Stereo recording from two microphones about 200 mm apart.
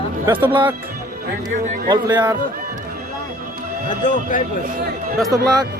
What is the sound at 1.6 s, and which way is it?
Speech, 45° right (ahead or behind).